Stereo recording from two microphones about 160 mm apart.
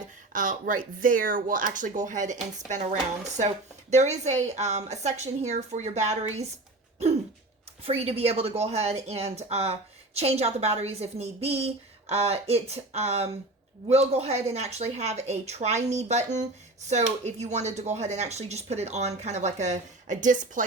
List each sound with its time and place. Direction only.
0.3 s speech: 55° right (ahead or behind)
7.9 s a woman's voice: 40° right (ahead or behind)